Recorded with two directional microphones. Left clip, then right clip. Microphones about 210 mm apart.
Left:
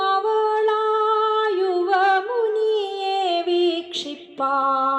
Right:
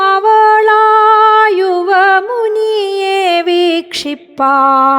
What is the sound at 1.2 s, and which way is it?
Female singing, 55° right (ahead or behind).